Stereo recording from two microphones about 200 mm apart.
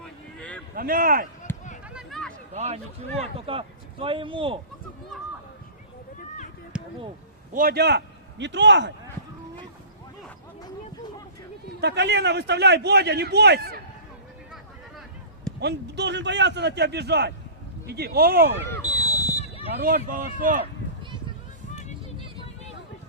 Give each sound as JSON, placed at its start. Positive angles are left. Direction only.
{"t": 0.0, "sound": "a sound", "side_deg": 5}
{"t": 0.8, "sound": "speech", "side_deg": -45}
{"t": 1.5, "sound": "a sound", "side_deg": 10}
{"t": 1.9, "sound": "a sound", "side_deg": 0}
{"t": 2.5, "sound": "a man's voice", "side_deg": -35}
{"t": 6.7, "sound": "a sound", "side_deg": -5}
{"t": 7.5, "sound": "a man's voice", "side_deg": -45}
{"t": 11.8, "sound": "a man's voice", "side_deg": -60}
{"t": 15.6, "sound": "a man's voice", "side_deg": -60}
{"t": 18.7, "sound": "basketball bounce", "side_deg": 15}
{"t": 20.1, "sound": "speech", "side_deg": -45}
{"t": 21.7, "sound": "vehicle", "side_deg": 35}